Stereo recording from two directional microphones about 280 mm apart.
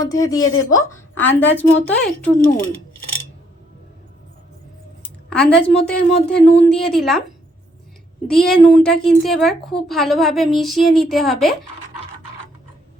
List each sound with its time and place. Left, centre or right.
0.0 s a woman's voice: centre
5.3 s a woman's voice: centre
8.3 s a woman's voice: centre